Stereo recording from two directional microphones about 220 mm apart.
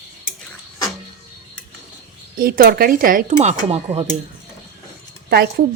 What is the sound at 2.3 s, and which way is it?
Speech, 40° right (ahead or behind).